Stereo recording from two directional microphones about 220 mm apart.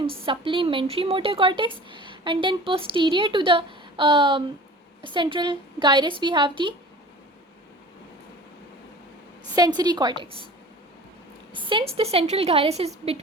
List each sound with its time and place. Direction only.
0.3 s speech: 25° right (ahead or behind)
9.6 s speech: 20° right (ahead or behind)
11.5 s speech: 20° right (ahead or behind)